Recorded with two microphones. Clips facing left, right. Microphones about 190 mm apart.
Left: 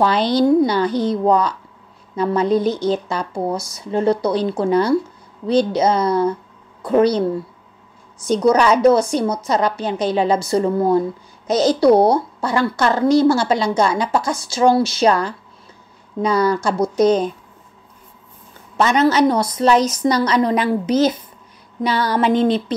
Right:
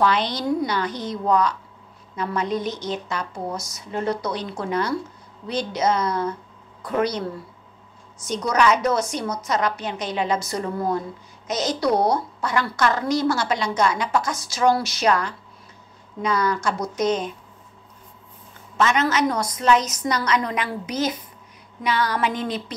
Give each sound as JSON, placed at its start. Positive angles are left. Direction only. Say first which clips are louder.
{"t": 0.0, "sound": "speech", "louder": "left 7 dB", "side_deg": 30}
{"t": 8.5, "sound": "a woman's voice", "louder": "left 7 dB", "side_deg": 30}
{"t": 18.8, "sound": "a woman's voice", "louder": "left 6 dB", "side_deg": 35}